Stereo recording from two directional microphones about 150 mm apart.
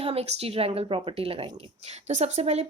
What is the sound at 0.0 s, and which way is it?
A woman's voice, 40° right (ahead or behind).